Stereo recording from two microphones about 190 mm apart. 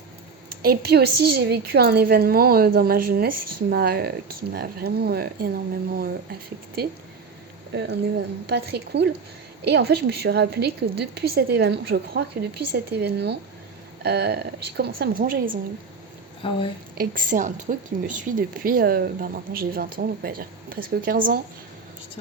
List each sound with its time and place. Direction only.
0.6 s a woman's voice: 55° right (ahead or behind)
7.7 s a woman's voice: 65° right (ahead or behind); by 15.5 s 45° right (ahead or behind)
16.4 s speech: 25° left (ahead or behind)
17.0 s a woman's voice: 45° right (ahead or behind)